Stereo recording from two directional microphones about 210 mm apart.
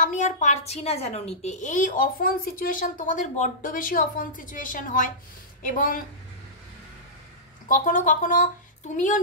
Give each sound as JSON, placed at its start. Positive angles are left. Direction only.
{"t": 0.0, "sound": "a woman's voice", "side_deg": 35}
{"t": 7.6, "sound": "a woman's voice", "side_deg": 40}